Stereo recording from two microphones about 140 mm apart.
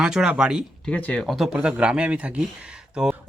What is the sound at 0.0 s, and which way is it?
Speech, 5° right (ahead or behind).